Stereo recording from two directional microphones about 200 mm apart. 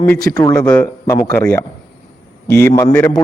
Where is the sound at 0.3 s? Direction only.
20° left (ahead or behind).